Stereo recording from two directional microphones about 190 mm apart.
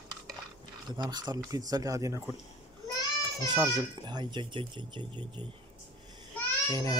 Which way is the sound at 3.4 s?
20° right (ahead or behind).